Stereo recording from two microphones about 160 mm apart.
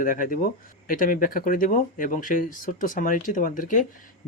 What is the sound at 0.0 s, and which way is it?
Speech, 60° left (ahead or behind).